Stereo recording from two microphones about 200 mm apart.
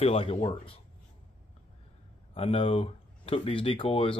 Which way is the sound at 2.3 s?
30° left (ahead or behind).